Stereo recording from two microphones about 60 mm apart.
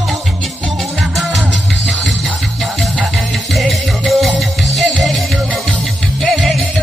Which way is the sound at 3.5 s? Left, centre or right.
Centre.